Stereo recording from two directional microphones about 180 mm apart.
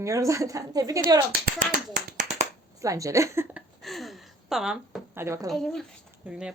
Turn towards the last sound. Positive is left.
turn(degrees=-5)  # may be behind; listen again after turning